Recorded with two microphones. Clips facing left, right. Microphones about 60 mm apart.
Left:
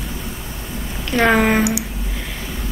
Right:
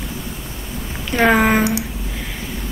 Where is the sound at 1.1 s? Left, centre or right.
Centre.